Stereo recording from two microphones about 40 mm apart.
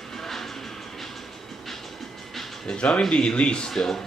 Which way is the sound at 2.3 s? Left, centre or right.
Centre.